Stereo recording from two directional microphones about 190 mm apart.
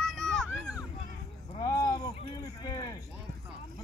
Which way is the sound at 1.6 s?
20° left (ahead or behind).